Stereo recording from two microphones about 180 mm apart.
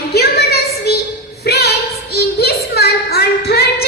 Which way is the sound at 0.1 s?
65° left (ahead or behind).